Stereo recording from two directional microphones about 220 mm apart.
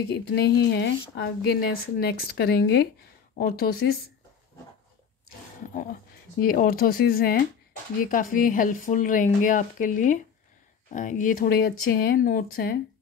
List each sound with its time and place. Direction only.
0.1 s speech: 50° left (ahead or behind)
6.4 s speech: 40° left (ahead or behind)